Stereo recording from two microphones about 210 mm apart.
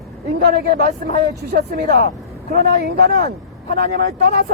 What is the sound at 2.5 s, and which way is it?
Speech, 50° right (ahead or behind).